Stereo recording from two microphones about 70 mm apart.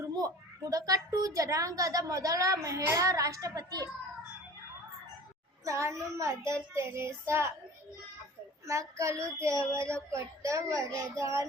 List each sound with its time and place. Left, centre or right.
0.2 s a woman's voice: right
5.6 s a woman's voice: right
8.6 s a woman's voice: right